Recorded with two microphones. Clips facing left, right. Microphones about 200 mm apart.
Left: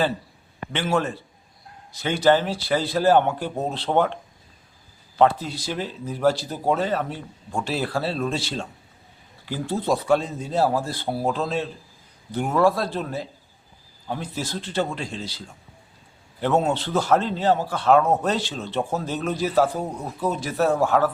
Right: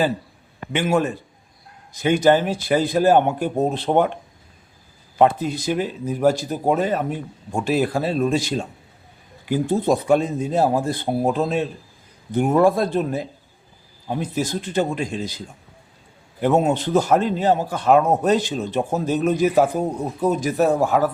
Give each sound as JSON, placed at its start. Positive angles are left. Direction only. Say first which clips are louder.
{"t": 0.7, "sound": "a man's voice", "louder": "right 4 dB", "side_deg": -15}